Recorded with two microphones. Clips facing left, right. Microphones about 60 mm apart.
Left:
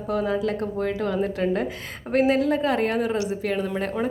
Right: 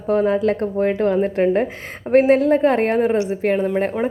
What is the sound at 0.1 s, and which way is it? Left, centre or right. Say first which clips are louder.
A woman's voice: right 7 dB; right.